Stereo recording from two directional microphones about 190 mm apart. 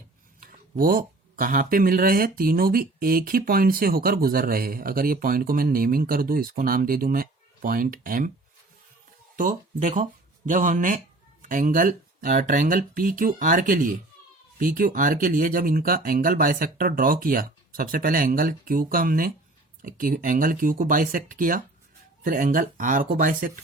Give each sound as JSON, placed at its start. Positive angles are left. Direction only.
{"t": 0.3, "sound": "speech", "side_deg": -50}
{"t": 9.3, "sound": "speech", "side_deg": -45}